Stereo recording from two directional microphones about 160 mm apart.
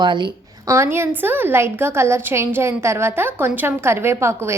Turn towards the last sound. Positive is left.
turn(degrees=-15)  # may be behind; listen again after turning